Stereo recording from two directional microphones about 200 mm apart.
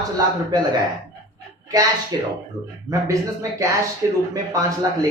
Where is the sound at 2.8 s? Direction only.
15° right (ahead or behind).